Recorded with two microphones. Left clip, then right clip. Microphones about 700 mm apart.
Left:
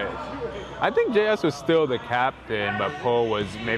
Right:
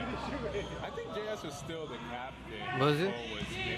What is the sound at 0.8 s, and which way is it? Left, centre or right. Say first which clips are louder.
Speech: left 18 dB; left.